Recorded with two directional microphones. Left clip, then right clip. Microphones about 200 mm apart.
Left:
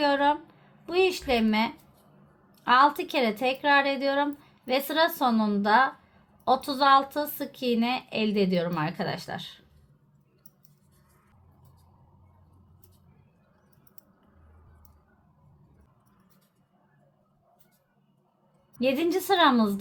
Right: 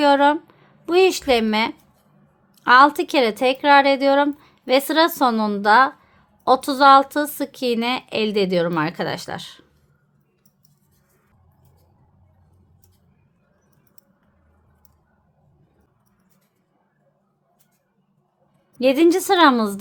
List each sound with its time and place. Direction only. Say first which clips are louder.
0.0 s a woman's voice: right 8 dB; 50° right (ahead or behind)
18.8 s speech: right 10 dB; 45° right (ahead or behind)